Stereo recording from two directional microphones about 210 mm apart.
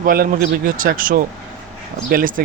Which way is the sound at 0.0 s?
45° right (ahead or behind).